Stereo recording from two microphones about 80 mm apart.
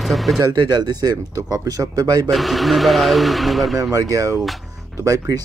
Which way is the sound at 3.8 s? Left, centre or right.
Right.